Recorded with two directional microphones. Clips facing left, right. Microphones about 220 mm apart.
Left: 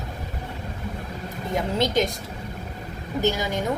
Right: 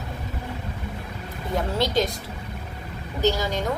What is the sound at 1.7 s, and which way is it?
Speech, 20° left (ahead or behind).